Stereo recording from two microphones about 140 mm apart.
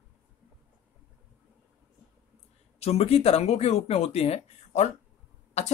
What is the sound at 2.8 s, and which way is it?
Speech, 45° left (ahead or behind).